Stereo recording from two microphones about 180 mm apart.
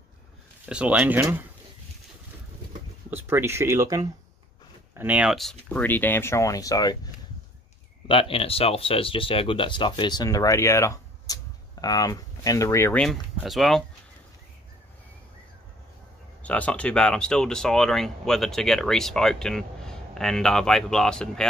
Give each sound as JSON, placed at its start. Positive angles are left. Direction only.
{"t": 0.7, "sound": "speech", "side_deg": -5}
{"t": 3.1, "sound": "speech", "side_deg": -10}
{"t": 8.1, "sound": "speech", "side_deg": 30}
{"t": 16.4, "sound": "speech", "side_deg": 5}